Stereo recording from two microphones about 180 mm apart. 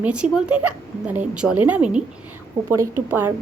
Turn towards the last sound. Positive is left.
turn(degrees=-10)  # may be behind; listen again after turning